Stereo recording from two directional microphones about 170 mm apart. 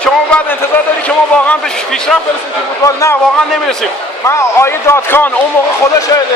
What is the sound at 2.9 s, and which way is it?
Speech, 20° left (ahead or behind).